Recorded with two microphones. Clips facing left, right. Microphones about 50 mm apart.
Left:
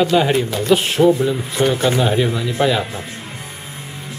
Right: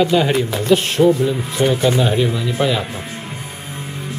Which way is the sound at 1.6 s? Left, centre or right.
Left.